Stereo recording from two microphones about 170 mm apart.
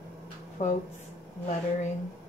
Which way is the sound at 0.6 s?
45° left (ahead or behind).